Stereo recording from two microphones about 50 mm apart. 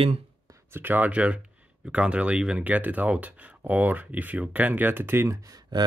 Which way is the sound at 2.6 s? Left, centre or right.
Right.